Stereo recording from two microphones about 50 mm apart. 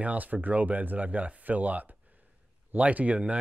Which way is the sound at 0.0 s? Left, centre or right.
Right.